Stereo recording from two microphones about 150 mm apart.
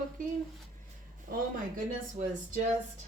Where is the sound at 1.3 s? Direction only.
70° right (ahead or behind).